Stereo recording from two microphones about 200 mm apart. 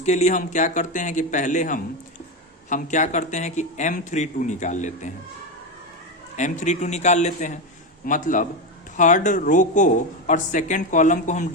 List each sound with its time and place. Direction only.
0.0 s speech: 35° left (ahead or behind)
6.3 s speech: 35° left (ahead or behind)